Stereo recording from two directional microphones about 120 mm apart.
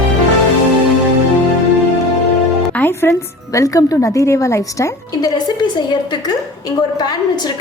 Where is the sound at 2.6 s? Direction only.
15° left (ahead or behind).